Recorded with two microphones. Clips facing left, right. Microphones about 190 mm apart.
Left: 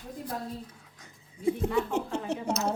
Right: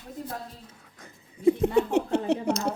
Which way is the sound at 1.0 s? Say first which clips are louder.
Right 7 dB; 65° right (ahead or behind).